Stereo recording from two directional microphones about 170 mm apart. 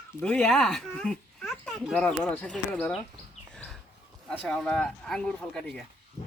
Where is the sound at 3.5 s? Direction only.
5° left (ahead or behind).